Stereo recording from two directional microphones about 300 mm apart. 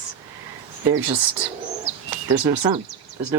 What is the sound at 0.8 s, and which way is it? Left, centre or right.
Speech, centre.